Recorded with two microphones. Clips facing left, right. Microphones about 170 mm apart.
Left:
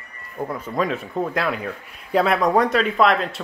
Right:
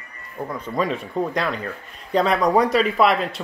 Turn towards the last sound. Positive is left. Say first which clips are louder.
# even
turn(degrees=0)  # may be behind; listen again after turning